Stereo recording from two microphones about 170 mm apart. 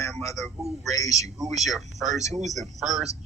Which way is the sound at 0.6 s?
40° right (ahead or behind).